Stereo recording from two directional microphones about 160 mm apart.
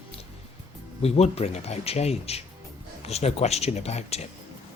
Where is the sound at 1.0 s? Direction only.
40° left (ahead or behind).